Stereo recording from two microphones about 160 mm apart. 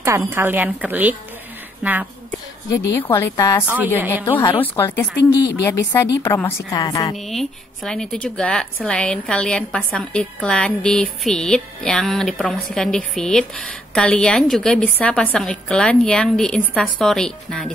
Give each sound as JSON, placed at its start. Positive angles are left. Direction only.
{"t": 0.0, "sound": "a woman's voice", "side_deg": -15}
{"t": 2.7, "sound": "a woman's voice", "side_deg": 20}
{"t": 3.6, "sound": "a woman's voice", "side_deg": -10}
{"t": 4.3, "sound": "a woman's voice", "side_deg": 30}
{"t": 4.6, "sound": "a woman's voice", "side_deg": 15}
{"t": 7.2, "sound": "a woman's voice", "side_deg": 0}